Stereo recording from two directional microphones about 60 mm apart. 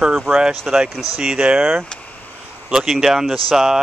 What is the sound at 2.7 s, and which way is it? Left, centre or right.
Speech, centre.